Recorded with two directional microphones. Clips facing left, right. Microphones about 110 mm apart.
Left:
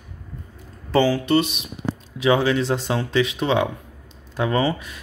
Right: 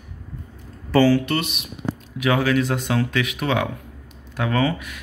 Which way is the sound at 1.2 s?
35° left (ahead or behind).